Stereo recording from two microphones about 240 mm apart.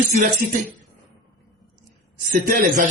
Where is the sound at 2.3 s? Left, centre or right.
Right.